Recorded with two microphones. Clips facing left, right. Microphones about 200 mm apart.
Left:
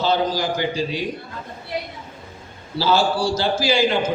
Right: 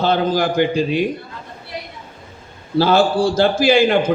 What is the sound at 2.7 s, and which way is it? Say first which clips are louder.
A man's voice: right 5 dB; 55° right (ahead or behind).